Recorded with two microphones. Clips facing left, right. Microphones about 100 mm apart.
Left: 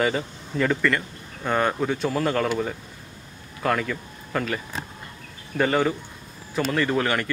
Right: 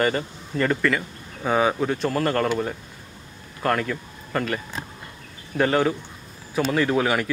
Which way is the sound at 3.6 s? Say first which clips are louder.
Right 1 dB; centre (ahead or behind).